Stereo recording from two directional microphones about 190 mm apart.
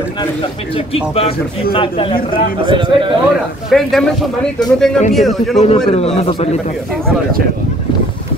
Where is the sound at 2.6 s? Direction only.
25° right (ahead or behind).